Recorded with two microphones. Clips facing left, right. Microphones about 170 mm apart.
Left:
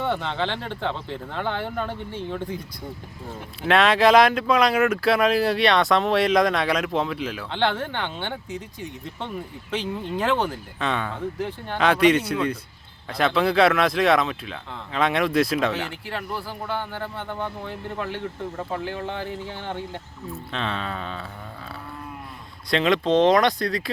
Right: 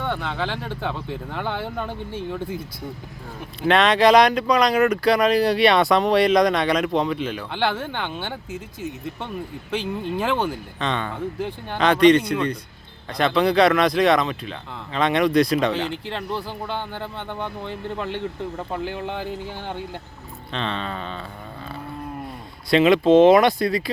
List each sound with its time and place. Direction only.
0.0 s speech: centre (ahead or behind)
3.7 s speech: 5° left (ahead or behind)
7.5 s speech: 10° right (ahead or behind)
9.7 s speech: 15° right (ahead or behind)
10.8 s speech: 5° left (ahead or behind)
11.1 s speech: 15° right (ahead or behind)
11.8 s speech: 5° left (ahead or behind)
15.7 s speech: 20° right (ahead or behind)
20.5 s speech: 5° left (ahead or behind)
22.7 s speech: 5° right (ahead or behind)